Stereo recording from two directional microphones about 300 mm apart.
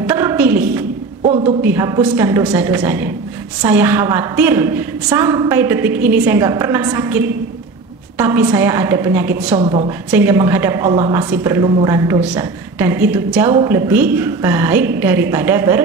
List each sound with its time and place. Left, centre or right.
0.0 s a sound: centre
1.2 s a woman's voice: centre
1.6 s a woman's voice: centre
9.6 s a woman's voice: centre